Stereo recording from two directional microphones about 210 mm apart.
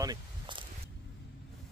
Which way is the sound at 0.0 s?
20° right (ahead or behind).